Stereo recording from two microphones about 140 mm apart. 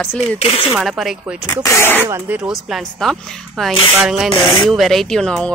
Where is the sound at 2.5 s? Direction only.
Centre (ahead or behind).